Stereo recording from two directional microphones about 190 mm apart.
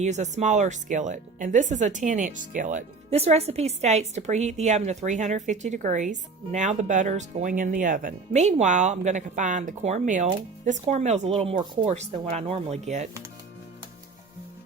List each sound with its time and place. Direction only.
0.0 s speech: 40° right (ahead or behind)